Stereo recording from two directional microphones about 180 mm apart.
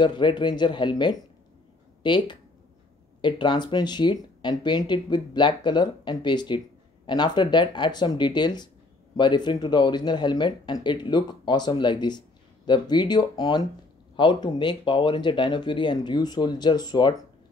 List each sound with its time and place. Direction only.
0.0 s speech: 25° left (ahead or behind)